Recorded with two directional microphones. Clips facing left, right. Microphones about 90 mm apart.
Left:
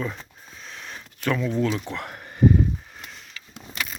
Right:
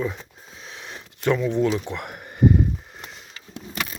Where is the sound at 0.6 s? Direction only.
20° right (ahead or behind).